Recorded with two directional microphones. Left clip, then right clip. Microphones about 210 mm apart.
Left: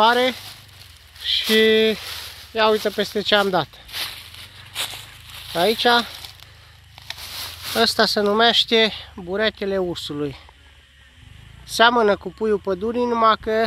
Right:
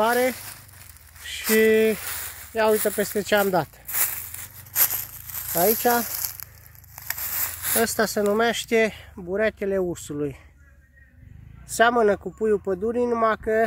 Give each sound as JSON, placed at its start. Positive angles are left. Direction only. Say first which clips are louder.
{"t": 0.0, "sound": "speech", "louder": "left 5 dB", "side_deg": 5}
{"t": 4.7, "sound": "a sound", "louder": "left 1 dB", "side_deg": -20}
{"t": 5.5, "sound": "speech", "louder": "left 4 dB", "side_deg": 10}
{"t": 7.2, "sound": "a sound", "louder": "left 4 dB", "side_deg": -5}
{"t": 7.8, "sound": "speech", "louder": "left 5 dB", "side_deg": 0}
{"t": 11.6, "sound": "speech", "louder": "left 3 dB", "side_deg": 0}